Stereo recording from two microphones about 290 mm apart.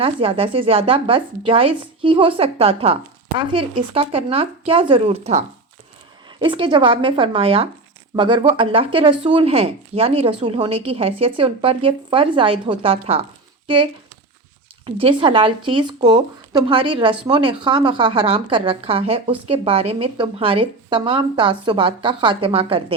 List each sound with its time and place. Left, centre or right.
0.0 s a woman's voice: centre
14.8 s speech: centre